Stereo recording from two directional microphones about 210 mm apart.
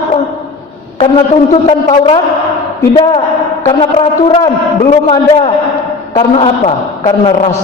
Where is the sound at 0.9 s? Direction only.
30° left (ahead or behind).